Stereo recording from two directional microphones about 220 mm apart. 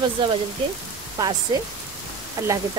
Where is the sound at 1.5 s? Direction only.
15° right (ahead or behind).